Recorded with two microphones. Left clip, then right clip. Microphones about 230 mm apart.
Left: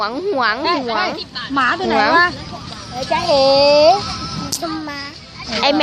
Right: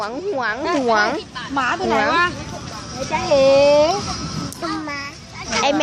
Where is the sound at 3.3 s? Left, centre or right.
Centre.